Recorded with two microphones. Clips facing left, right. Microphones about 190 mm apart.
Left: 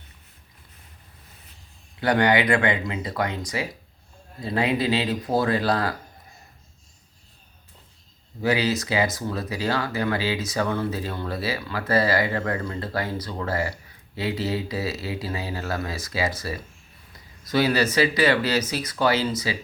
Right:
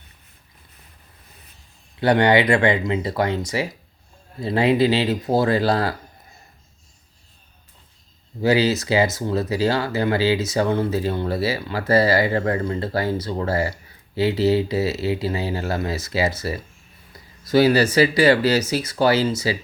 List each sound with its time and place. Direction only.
2.0 s speech: 25° right (ahead or behind)
8.4 s speech: 30° right (ahead or behind)